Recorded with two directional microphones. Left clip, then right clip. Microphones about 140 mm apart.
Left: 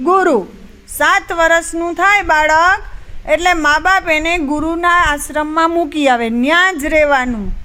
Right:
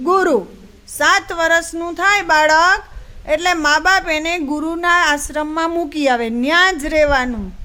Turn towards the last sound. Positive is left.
turn(degrees=0)  # may be behind; listen again after turning